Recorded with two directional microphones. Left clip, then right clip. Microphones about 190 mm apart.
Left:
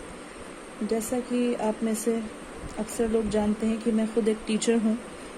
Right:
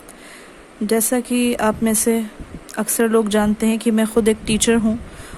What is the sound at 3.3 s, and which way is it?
Speech, 55° right (ahead or behind).